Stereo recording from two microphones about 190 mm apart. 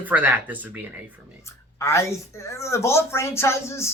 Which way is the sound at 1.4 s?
15° left (ahead or behind).